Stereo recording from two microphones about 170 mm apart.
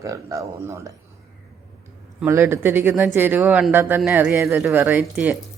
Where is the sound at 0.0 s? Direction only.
20° right (ahead or behind).